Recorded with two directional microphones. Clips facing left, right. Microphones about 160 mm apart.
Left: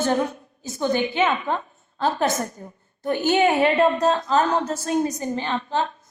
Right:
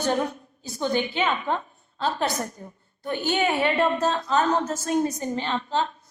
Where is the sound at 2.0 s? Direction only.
45° left (ahead or behind).